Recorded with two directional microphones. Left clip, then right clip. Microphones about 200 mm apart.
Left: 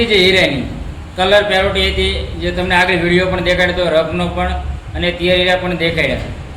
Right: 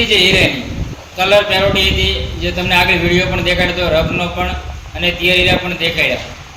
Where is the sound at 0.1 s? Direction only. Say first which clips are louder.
Even; centre (ahead or behind).